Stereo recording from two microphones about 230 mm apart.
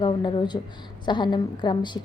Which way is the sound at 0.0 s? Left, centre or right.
Left.